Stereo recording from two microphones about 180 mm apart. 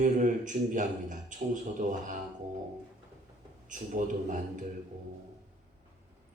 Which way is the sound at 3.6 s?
45° right (ahead or behind).